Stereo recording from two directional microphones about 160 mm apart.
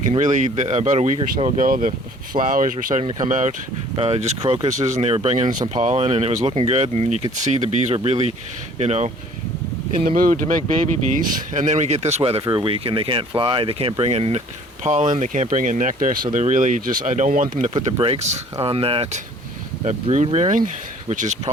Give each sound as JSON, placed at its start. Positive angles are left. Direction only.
{"t": 0.1, "sound": "speech", "side_deg": -50}
{"t": 3.9, "sound": "speech", "side_deg": -40}
{"t": 10.2, "sound": "speech", "side_deg": -55}
{"t": 18.0, "sound": "speech", "side_deg": -40}